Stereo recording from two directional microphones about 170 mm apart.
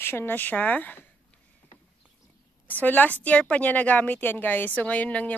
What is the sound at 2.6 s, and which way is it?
A woman's voice, 10° left (ahead or behind).